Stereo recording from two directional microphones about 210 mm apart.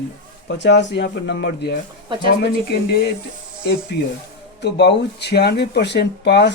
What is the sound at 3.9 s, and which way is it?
Speech, 50° left (ahead or behind).